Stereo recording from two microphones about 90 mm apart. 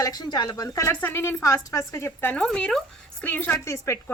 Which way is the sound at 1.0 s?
30° left (ahead or behind).